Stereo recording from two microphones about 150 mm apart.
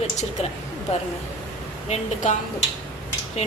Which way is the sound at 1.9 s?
50° left (ahead or behind).